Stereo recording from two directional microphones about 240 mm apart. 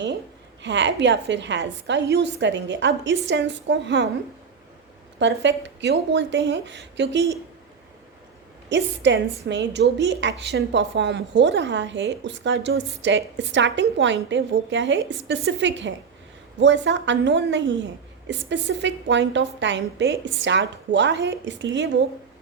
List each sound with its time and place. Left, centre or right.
0.6 s a woman's voice: right
5.2 s a woman's voice: right
8.7 s a woman's voice: right